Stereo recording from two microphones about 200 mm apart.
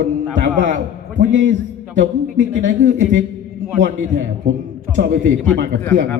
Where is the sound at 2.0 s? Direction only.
40° right (ahead or behind).